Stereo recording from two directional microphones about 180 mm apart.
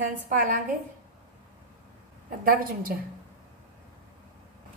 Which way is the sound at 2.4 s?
55° right (ahead or behind).